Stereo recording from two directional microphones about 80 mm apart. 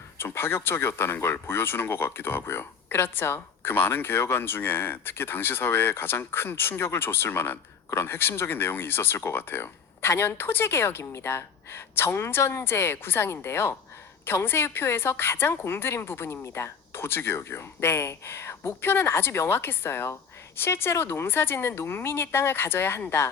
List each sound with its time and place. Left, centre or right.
0.2 s speech: left